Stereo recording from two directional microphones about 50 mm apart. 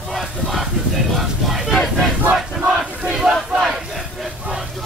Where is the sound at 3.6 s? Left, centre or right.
Centre.